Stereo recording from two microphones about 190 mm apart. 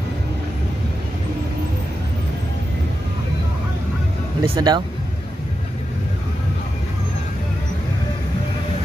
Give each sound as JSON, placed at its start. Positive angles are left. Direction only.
{"t": 4.4, "sound": "speech", "side_deg": -20}